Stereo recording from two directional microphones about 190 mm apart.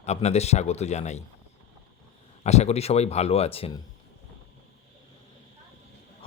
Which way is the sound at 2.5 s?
35° left (ahead or behind).